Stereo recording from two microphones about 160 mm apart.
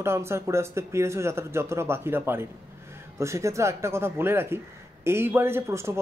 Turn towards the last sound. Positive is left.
turn(degrees=-15)  # may be behind; listen again after turning